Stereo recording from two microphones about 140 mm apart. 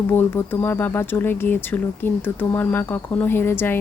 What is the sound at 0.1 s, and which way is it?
A woman's voice, 15° left (ahead or behind).